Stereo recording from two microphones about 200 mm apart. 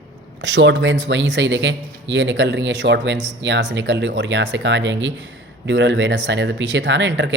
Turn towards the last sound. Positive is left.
turn(degrees=-60)  # may be behind; listen again after turning